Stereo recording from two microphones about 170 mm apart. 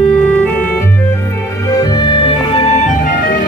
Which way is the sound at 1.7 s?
25° left (ahead or behind).